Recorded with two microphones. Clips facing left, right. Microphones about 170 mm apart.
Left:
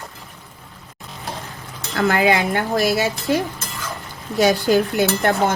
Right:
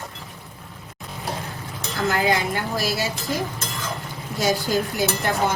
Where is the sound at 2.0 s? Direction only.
65° left (ahead or behind).